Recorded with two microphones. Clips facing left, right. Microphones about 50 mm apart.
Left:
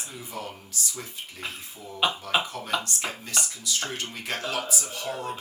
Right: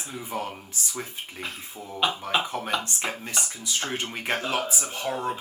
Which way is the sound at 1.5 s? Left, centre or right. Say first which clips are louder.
Right 2 dB; centre.